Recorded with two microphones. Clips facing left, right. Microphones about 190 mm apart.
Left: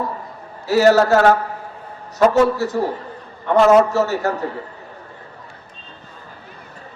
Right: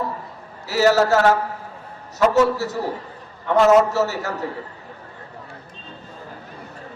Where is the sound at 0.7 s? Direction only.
55° left (ahead or behind).